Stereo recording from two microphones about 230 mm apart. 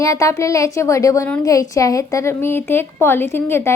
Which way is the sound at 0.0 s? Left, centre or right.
Centre.